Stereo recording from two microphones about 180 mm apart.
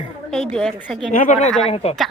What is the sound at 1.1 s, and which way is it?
Speech, 45° left (ahead or behind).